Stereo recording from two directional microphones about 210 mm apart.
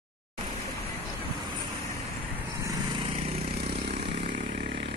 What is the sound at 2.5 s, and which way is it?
Vehicle, 15° right (ahead or behind).